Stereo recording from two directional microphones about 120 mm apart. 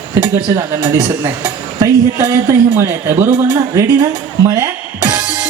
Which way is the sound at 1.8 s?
25° right (ahead or behind).